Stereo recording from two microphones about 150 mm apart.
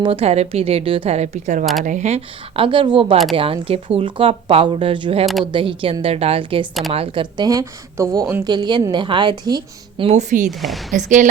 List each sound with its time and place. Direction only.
0.0 s a woman's voice: 40° right (ahead or behind)
5.2 s speech: centre (ahead or behind)
5.5 s a woman's voice: 35° right (ahead or behind); by 8.4 s 15° right (ahead or behind)
8.4 s a woman's voice: 30° right (ahead or behind)
10.1 s a woman's voice: 50° right (ahead or behind)